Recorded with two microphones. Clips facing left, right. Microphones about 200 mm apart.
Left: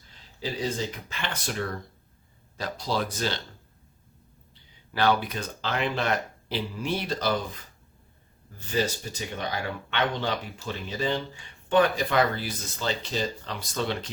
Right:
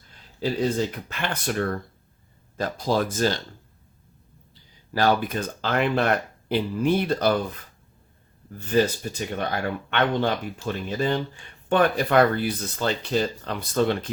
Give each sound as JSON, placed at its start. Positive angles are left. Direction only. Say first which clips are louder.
{"t": 1.2, "sound": "speech", "louder": "right 6 dB", "side_deg": -55}
{"t": 4.9, "sound": "speech", "louder": "right 3 dB", "side_deg": -45}
{"t": 8.5, "sound": "speech", "louder": "right 6 dB", "side_deg": -55}